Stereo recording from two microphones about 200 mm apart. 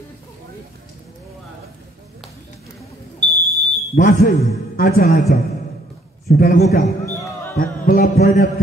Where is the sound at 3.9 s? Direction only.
40° left (ahead or behind).